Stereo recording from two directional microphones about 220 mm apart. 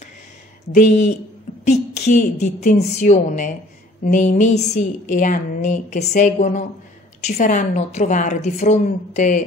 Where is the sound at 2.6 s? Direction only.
30° left (ahead or behind).